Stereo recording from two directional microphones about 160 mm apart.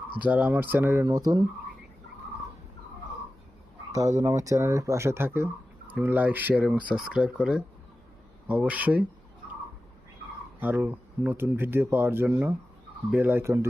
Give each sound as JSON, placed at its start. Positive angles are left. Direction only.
{"t": 0.2, "sound": "speech", "side_deg": -10}
{"t": 4.2, "sound": "speech", "side_deg": -20}
{"t": 10.6, "sound": "speech", "side_deg": -10}